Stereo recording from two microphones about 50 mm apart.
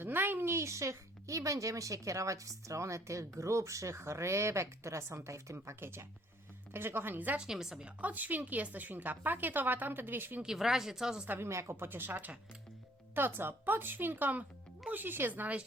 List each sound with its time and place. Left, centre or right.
0.0 s a woman's voice: right
5.8 s speech: right
7.3 s speech: centre
7.9 s speech: right
10.4 s speech: centre
11.4 s speech: right